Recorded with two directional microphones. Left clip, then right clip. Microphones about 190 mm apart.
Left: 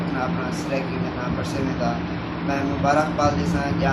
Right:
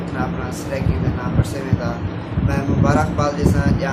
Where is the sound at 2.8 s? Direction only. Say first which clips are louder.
Even; 20° right (ahead or behind).